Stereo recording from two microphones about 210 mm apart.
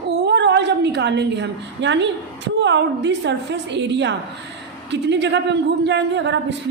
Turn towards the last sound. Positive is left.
turn(degrees=-60)  # may be behind; listen again after turning